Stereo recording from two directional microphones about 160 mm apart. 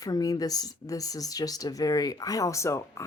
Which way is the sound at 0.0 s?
20° left (ahead or behind).